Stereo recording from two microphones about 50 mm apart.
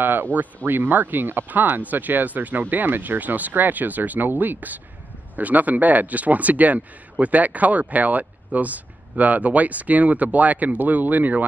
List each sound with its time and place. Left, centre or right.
0.0 s speech: right